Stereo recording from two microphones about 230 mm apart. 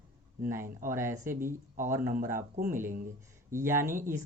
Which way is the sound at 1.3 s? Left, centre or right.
Right.